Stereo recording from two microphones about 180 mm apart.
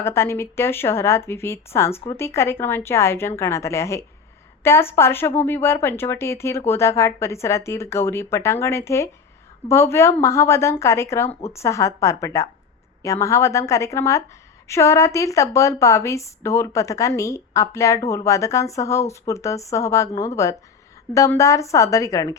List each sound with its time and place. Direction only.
0.0 s a woman's voice: 15° left (ahead or behind)